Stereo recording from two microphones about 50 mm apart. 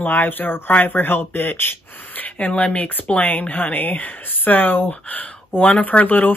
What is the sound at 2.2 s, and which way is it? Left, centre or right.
Speech, left.